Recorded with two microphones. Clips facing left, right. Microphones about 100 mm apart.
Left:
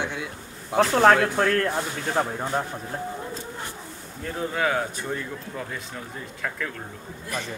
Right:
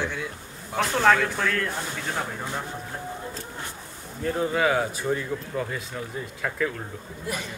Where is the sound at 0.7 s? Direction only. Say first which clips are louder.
Left 4 dB; 40° left (ahead or behind).